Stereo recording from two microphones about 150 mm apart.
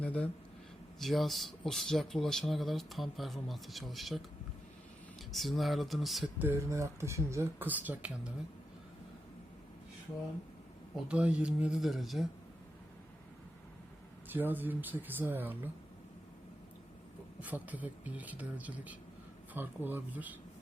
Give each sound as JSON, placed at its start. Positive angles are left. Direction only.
{"t": 0.0, "sound": "speech", "side_deg": 10}
{"t": 5.3, "sound": "speech", "side_deg": 0}
{"t": 6.4, "sound": "speech", "side_deg": -20}
{"t": 10.9, "sound": "speech", "side_deg": -5}
{"t": 14.3, "sound": "speech", "side_deg": -15}
{"t": 17.4, "sound": "speech", "side_deg": -10}